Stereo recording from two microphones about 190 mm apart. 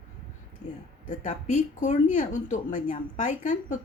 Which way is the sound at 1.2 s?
40° left (ahead or behind).